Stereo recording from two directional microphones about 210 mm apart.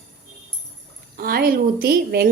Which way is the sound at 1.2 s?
45° right (ahead or behind).